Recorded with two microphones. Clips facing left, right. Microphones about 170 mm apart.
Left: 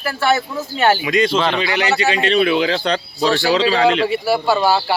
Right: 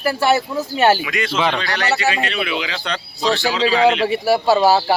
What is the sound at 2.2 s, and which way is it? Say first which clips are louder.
Speech: left 8 dB; 35° left (ahead or behind).